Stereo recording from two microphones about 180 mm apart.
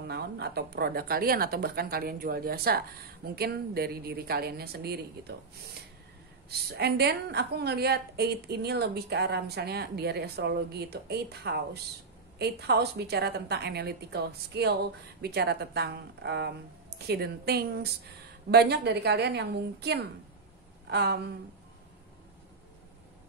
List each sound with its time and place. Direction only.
0.0 s a woman's voice: 65° right (ahead or behind)
6.7 s a woman's voice: 65° right (ahead or behind)